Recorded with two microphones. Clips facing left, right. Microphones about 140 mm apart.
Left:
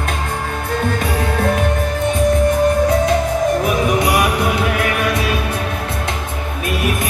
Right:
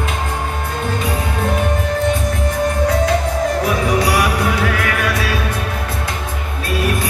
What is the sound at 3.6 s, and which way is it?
Music, 20° left (ahead or behind).